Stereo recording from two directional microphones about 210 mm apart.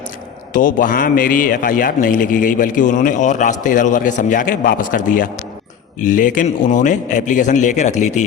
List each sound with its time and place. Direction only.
0.5 s a man's voice: 40° left (ahead or behind)